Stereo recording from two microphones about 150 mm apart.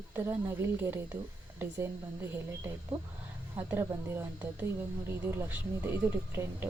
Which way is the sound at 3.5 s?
15° right (ahead or behind).